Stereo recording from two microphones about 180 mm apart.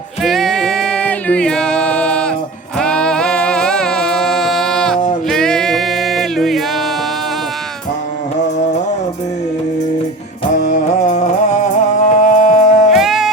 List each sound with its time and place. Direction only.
0.2 s singing: centre (ahead or behind)
2.7 s music: 5° left (ahead or behind)
10.7 s music: 40° left (ahead or behind)
12.9 s music: centre (ahead or behind)